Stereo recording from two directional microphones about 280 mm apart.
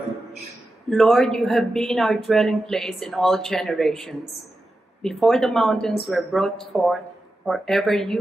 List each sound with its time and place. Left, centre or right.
0.8 s a woman's voice: centre